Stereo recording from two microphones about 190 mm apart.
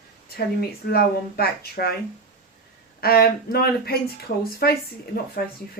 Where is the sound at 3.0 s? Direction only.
55° left (ahead or behind).